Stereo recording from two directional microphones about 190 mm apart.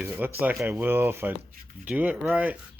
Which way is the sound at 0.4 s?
10° right (ahead or behind).